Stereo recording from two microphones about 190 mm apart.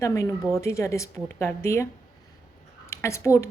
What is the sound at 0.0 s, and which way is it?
A woman's voice, 15° left (ahead or behind).